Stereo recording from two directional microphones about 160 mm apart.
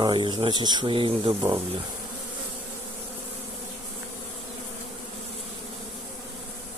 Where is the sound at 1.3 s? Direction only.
20° right (ahead or behind).